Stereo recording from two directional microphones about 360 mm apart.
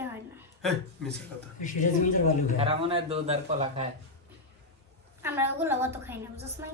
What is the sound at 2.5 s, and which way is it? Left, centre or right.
A man's voice, centre.